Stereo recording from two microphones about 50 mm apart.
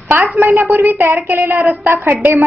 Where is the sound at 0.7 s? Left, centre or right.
Right.